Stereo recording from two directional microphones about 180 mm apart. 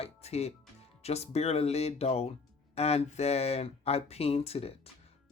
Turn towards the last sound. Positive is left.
turn(degrees=35)  # may be behind; listen again after turning